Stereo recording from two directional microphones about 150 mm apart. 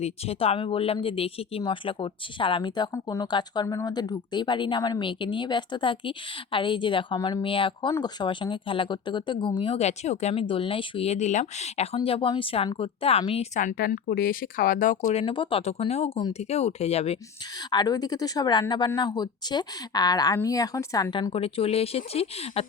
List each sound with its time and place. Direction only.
0.0 s a woman's voice: 40° left (ahead or behind)
10.5 s a woman's voice: 35° left (ahead or behind); by 15.1 s 60° left (ahead or behind)
15.1 s a woman's voice: 35° left (ahead or behind)
17.7 s speech: 25° left (ahead or behind); by 22.6 s 40° left (ahead or behind)